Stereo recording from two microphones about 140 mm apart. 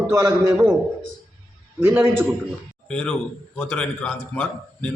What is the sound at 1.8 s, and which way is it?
Speech, 15° right (ahead or behind).